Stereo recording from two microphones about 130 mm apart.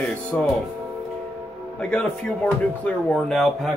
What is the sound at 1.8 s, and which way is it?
Speech, 10° left (ahead or behind).